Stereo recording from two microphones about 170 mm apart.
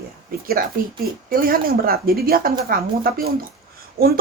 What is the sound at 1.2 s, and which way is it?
Speech, 60° right (ahead or behind).